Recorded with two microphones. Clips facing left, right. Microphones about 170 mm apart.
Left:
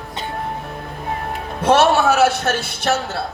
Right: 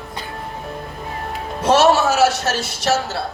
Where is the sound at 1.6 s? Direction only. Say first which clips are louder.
Even; 55° left (ahead or behind).